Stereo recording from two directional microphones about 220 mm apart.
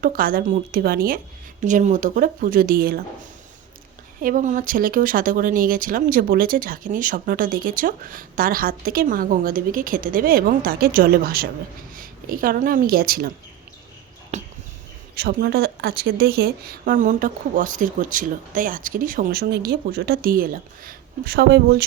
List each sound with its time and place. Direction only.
0.0 s speech: 40° right (ahead or behind)
4.2 s speech: 40° right (ahead or behind)
14.3 s a sound: 30° right (ahead or behind)
15.1 s speech: 45° right (ahead or behind)